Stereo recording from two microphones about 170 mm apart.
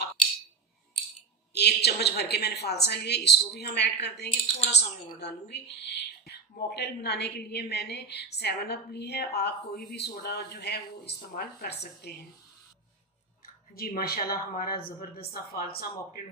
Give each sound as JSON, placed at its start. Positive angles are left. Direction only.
{"t": 1.5, "sound": "speech", "side_deg": 75}
{"t": 13.7, "sound": "a woman's voice", "side_deg": 60}